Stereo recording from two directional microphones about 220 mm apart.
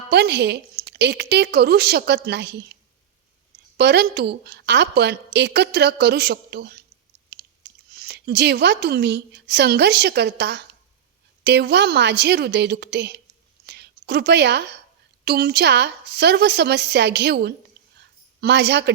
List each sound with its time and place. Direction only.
0.1 s a woman's voice: 50° right (ahead or behind)
3.8 s a woman's voice: 50° right (ahead or behind)
7.3 s chewing: 45° right (ahead or behind)
7.9 s a woman's voice: 45° right (ahead or behind)
13.7 s a sound: 50° right (ahead or behind)
15.2 s a woman's voice: 45° right (ahead or behind)